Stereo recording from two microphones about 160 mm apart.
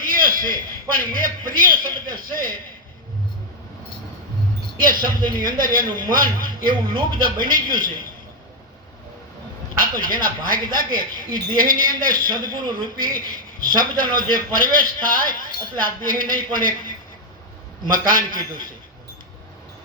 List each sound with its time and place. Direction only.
0.0 s a man's voice: 60° right (ahead or behind)
4.8 s speech: 60° right (ahead or behind)
9.7 s speech: 60° right (ahead or behind)